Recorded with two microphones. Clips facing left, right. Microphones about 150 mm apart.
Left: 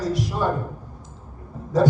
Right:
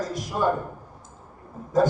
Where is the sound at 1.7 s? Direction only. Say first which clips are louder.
Left 2 dB; 45° right (ahead or behind).